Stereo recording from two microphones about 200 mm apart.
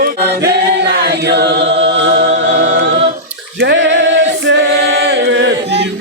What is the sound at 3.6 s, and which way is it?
A capella, 65° right (ahead or behind).